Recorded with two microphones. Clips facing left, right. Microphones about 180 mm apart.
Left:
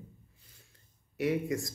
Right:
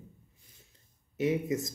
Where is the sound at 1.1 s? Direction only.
20° right (ahead or behind).